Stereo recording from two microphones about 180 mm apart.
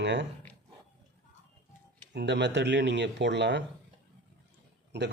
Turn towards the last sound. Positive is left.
turn(degrees=-75)  # may be behind; listen again after turning